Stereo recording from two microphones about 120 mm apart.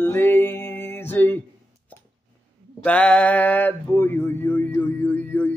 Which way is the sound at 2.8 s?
10° left (ahead or behind).